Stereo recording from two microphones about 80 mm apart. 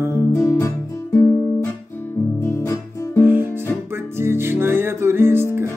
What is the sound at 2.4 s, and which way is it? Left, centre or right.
Music, left.